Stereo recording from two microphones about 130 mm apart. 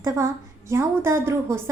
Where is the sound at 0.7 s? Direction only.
20° right (ahead or behind).